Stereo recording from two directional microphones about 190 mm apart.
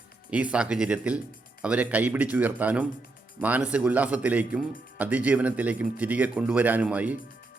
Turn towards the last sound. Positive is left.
turn(degrees=-10)  # may be behind; listen again after turning